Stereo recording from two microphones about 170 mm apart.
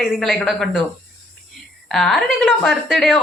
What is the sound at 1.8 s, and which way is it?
Speech, centre (ahead or behind).